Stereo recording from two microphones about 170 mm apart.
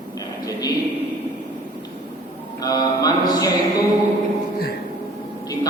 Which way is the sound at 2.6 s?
20° left (ahead or behind).